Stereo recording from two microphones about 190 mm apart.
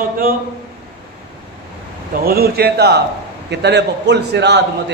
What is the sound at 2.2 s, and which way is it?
A man's voice, 55° right (ahead or behind).